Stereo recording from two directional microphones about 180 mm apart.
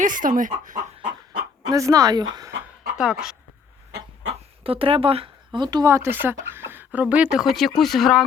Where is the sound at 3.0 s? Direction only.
5° right (ahead or behind).